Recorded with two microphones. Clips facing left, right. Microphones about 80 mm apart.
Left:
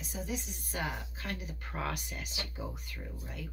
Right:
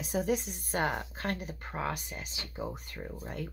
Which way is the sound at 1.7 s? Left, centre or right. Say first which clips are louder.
Right 2 dB; right.